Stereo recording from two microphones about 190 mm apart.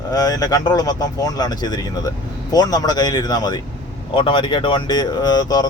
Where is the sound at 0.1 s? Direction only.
20° left (ahead or behind).